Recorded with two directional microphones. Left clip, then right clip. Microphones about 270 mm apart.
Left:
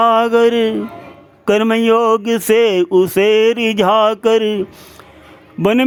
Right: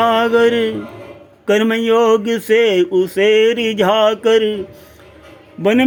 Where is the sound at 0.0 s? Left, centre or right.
Centre.